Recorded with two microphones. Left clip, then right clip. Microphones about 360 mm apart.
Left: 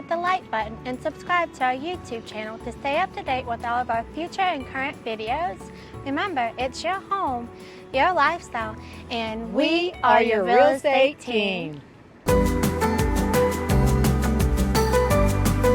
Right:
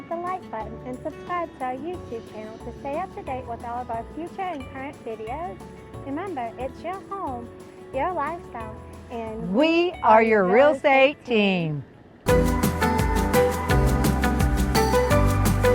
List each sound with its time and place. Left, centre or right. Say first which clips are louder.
0.1 s a woman's voice: left 6 dB; left
9.0 s music: left 5 dB; left
9.6 s speech: right 2 dB; right
12.2 s music: even; centre